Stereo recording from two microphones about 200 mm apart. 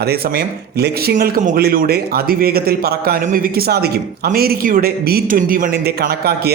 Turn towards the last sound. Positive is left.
turn(degrees=-50)  # may be behind; listen again after turning